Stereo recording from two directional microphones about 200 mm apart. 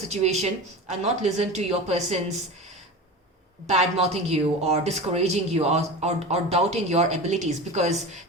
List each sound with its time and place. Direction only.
0.1 s speech: 35° right (ahead or behind)
3.7 s speech: 30° right (ahead or behind)